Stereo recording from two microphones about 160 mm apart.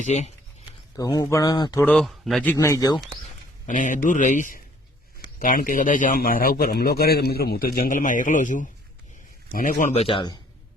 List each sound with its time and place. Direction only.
0.0 s speech: 45° left (ahead or behind)
0.9 s speech: 20° left (ahead or behind)
1.8 s a man's voice: 5° left (ahead or behind)
2.6 s speech: 20° left (ahead or behind)
3.7 s a man's voice: 55° left (ahead or behind)
10.0 s speech: 30° left (ahead or behind)